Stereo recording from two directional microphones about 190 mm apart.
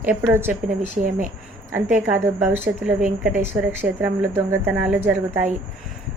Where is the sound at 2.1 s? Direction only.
10° right (ahead or behind).